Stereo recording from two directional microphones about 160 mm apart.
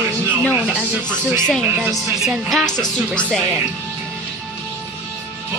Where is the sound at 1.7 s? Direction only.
10° right (ahead or behind).